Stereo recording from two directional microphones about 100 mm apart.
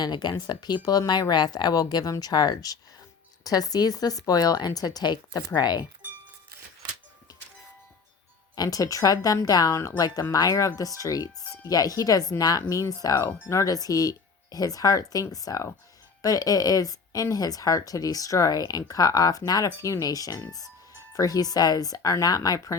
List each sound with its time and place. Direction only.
0.0 s a woman's voice: 45° left (ahead or behind)
8.5 s a woman's voice: 40° left (ahead or behind)